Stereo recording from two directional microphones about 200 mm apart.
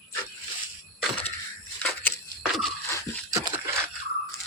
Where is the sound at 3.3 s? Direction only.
15° right (ahead or behind).